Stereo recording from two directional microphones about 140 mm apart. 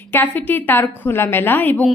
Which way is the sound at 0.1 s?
15° left (ahead or behind).